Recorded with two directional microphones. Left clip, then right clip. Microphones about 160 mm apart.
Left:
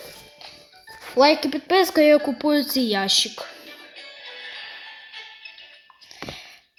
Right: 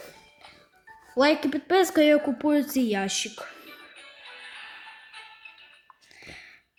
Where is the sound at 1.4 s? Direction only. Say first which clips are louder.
Left 3 dB; 15° right (ahead or behind).